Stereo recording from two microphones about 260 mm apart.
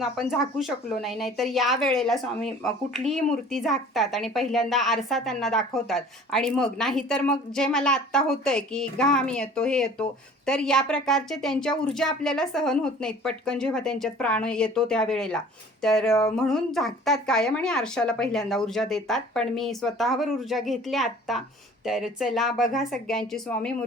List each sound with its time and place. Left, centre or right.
0.0 s speech: centre